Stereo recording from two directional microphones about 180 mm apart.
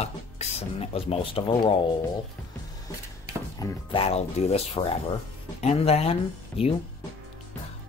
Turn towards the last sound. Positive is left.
turn(degrees=35)  # may be behind; listen again after turning